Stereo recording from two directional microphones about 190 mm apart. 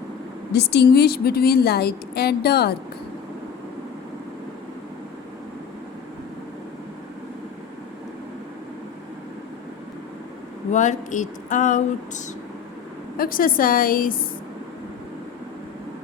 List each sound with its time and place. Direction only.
0.5 s a woman's voice: 60° left (ahead or behind)
10.7 s a woman's voice: 40° left (ahead or behind)